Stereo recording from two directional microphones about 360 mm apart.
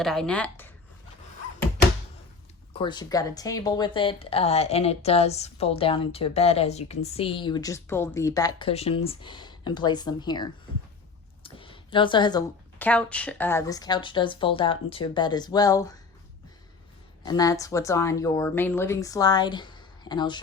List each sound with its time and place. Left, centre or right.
0.0 s speech: centre
2.7 s speech: centre
17.2 s speech: centre